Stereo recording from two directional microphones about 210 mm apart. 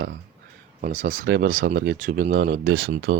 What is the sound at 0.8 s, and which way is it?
Speech, 35° right (ahead or behind).